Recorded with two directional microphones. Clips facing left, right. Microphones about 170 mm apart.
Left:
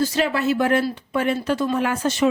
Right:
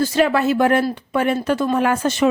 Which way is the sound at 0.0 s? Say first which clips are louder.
Right 4 dB; 55° right (ahead or behind).